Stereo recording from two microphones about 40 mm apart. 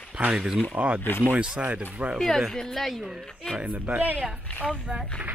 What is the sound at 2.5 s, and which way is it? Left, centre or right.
Speech, centre.